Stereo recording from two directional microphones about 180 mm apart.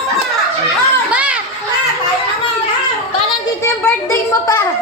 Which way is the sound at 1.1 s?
5° right (ahead or behind).